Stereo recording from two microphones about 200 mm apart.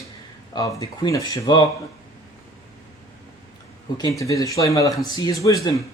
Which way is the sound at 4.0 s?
15° left (ahead or behind).